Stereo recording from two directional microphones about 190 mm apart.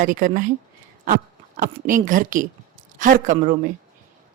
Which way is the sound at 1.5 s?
45° right (ahead or behind).